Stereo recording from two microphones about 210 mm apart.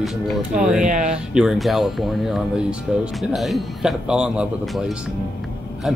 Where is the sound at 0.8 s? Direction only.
35° right (ahead or behind).